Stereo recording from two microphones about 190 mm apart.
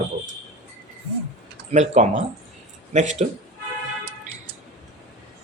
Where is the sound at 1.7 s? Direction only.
35° right (ahead or behind).